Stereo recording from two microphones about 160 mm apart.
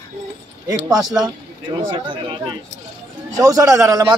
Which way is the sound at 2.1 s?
30° right (ahead or behind).